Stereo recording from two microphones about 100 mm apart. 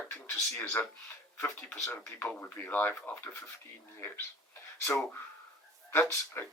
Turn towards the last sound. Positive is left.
turn(degrees=25)  # may be behind; listen again after turning